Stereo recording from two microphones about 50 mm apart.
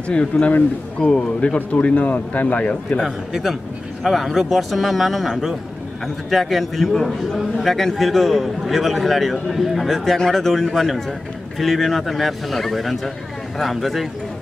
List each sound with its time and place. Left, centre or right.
0.1 s speech: centre
3.0 s a man's voice: centre